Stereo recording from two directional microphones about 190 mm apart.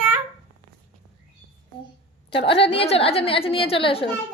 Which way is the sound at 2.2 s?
30° left (ahead or behind).